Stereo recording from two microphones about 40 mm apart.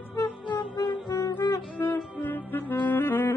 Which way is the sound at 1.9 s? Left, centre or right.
Left.